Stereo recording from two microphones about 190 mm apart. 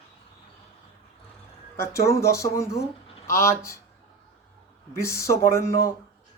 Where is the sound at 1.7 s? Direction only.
15° left (ahead or behind).